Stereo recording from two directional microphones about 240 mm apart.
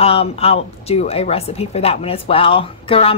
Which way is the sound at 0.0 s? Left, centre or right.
Left.